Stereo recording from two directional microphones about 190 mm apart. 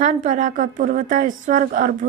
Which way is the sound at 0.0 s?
40° right (ahead or behind).